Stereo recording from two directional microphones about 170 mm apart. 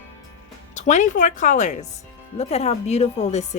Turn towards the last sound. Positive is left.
turn(degrees=40)  # may be behind; listen again after turning